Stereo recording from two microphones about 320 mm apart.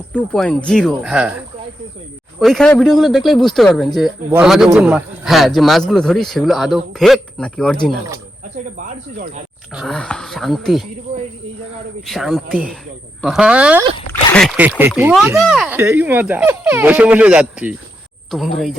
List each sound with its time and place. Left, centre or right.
0.1 s a man's voice: centre
2.4 s a man's voice: centre
9.7 s a man's voice: centre
12.0 s a man's voice: centre